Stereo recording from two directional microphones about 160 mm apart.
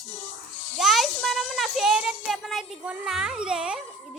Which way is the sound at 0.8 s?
Centre (ahead or behind).